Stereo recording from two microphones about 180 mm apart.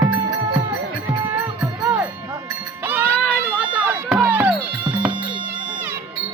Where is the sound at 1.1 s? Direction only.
10° right (ahead or behind).